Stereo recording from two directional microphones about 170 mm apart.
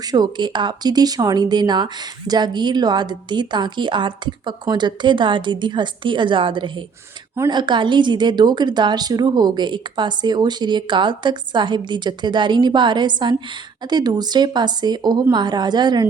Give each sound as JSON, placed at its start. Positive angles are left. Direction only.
{"t": 0.1, "sound": "speech", "side_deg": -25}